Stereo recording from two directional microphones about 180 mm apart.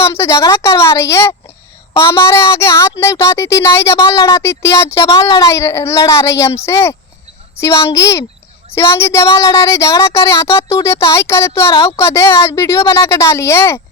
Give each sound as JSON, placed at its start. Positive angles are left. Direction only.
{"t": 0.0, "sound": "a woman's voice", "side_deg": 15}